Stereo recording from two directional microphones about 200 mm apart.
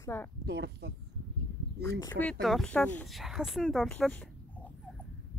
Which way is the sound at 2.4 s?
Centre (ahead or behind).